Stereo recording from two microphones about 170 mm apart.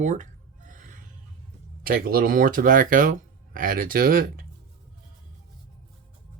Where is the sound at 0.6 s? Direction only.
50° right (ahead or behind).